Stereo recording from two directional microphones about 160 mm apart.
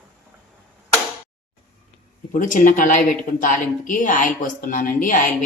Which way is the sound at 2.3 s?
55° left (ahead or behind).